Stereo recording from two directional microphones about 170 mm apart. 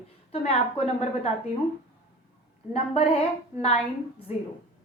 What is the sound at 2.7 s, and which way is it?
Speech, 35° left (ahead or behind).